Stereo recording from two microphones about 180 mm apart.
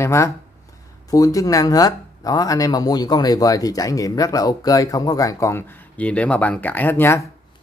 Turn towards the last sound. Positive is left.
turn(degrees=15)  # may be behind; listen again after turning